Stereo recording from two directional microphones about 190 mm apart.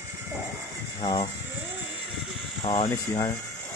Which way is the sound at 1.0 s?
25° left (ahead or behind).